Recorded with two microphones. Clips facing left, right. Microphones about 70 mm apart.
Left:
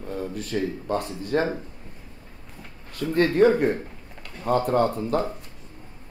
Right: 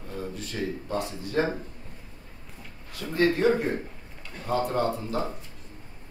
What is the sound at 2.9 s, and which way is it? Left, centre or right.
A man's voice, left.